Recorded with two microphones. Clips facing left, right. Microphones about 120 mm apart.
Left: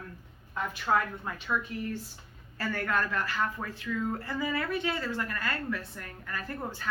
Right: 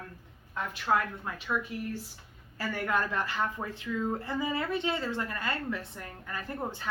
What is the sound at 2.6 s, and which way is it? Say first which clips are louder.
Speech: even; 15° right (ahead or behind).